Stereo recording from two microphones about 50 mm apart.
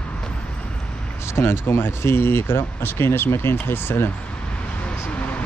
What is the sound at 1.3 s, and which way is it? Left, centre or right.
Speech, left.